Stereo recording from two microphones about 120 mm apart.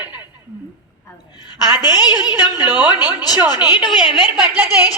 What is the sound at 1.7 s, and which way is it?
A woman's voice, 35° left (ahead or behind).